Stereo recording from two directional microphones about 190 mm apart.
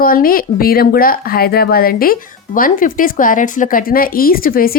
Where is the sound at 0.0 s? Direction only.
50° left (ahead or behind).